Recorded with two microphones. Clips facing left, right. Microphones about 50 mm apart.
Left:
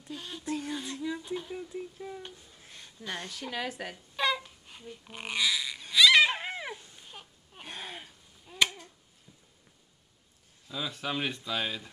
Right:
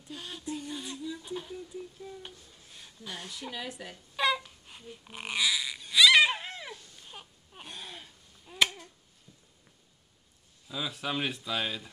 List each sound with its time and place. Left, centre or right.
0.1 s a sound: centre
0.5 s a sound: left
0.7 s a sound: left
1.2 s speech: centre
1.5 s speech: left
3.1 s speech: left
4.2 s babbling: centre
4.6 s speech: centre
5.9 s frog: centre
6.3 s cat: left
7.1 s baby cry: centre
7.6 s a sound: left
8.5 s finger snapping: centre
10.7 s speech: centre